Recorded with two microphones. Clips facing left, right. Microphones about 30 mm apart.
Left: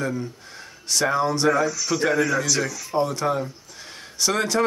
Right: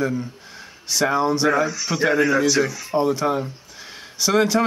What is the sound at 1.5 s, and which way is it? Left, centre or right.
A man's voice, right.